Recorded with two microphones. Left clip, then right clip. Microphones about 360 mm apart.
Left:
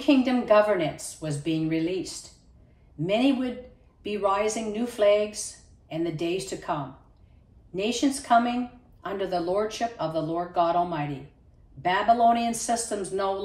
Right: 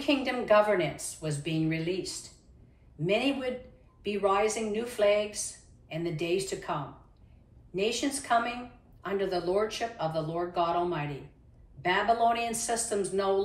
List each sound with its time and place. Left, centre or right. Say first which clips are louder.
0.1 s a woman's voice: left 4 dB; centre
3.1 s a woman's voice: left 3 dB; centre
9.0 s a woman's voice: left 2 dB; centre